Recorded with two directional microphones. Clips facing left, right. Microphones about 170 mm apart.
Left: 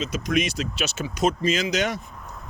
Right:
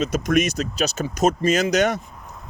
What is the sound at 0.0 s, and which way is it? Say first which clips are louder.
Speech: right 5 dB; 45° right (ahead or behind).